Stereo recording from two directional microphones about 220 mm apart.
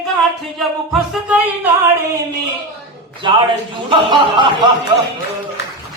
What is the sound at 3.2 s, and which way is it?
A man's voice, 20° right (ahead or behind).